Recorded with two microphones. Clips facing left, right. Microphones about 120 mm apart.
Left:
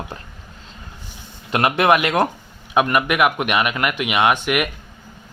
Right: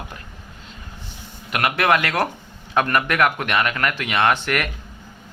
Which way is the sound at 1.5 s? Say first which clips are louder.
Left 3 dB; 25° left (ahead or behind).